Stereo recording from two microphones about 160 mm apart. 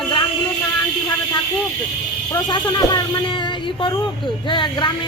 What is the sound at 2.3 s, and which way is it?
A woman's voice, 25° left (ahead or behind).